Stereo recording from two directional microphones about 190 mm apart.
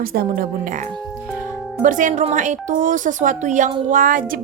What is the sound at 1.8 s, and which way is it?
A woman's voice, 40° right (ahead or behind).